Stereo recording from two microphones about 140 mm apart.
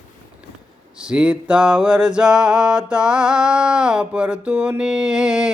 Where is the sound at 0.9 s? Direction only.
5° right (ahead or behind).